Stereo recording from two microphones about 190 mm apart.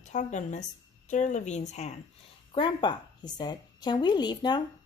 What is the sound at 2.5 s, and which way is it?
A woman's voice, 25° left (ahead or behind).